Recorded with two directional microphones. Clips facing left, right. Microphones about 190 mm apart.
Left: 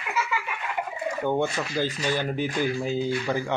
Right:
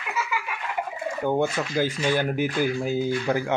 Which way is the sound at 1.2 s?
5° right (ahead or behind).